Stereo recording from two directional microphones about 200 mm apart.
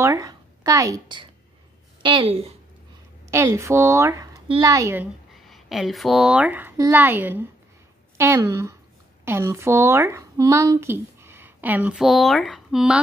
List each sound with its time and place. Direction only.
0.0 s a woman's voice: 15° right (ahead or behind)
3.3 s a woman's voice: 15° right (ahead or behind)